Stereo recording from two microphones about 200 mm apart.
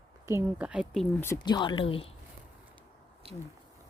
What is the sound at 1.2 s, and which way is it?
Speech, 15° left (ahead or behind).